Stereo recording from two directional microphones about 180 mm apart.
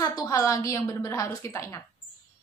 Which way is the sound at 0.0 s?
20° left (ahead or behind).